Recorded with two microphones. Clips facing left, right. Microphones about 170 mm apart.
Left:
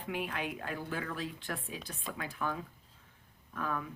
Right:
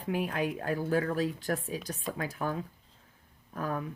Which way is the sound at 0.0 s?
40° right (ahead or behind).